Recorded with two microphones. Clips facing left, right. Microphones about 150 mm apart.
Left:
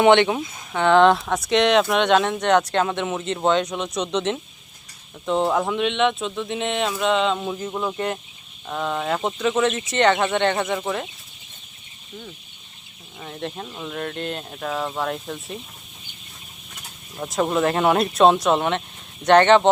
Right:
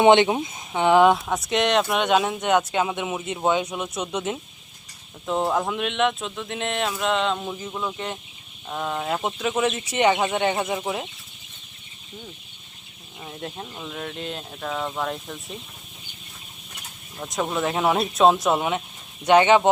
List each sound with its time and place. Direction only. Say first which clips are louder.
0.0 s speech: even; 20° right (ahead or behind); by 7.5 s centre (ahead or behind)
7.7 s speech: left 2 dB; 20° left (ahead or behind)
8.6 s speech: left 2 dB; 5° right (ahead or behind)
13.1 s speech: left 3 dB; 5° right (ahead or behind)
17.2 s speech: left 5 dB; 5° left (ahead or behind)